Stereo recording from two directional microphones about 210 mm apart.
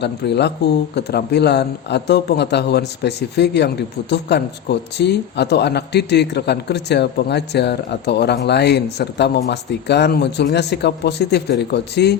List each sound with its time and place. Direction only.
0.0 s speech: 55° left (ahead or behind)